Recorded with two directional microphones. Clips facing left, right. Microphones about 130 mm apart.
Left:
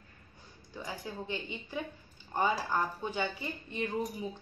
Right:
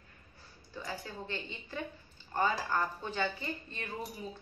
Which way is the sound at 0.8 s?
15° left (ahead or behind).